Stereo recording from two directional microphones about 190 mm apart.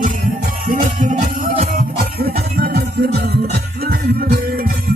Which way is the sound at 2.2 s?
55° right (ahead or behind).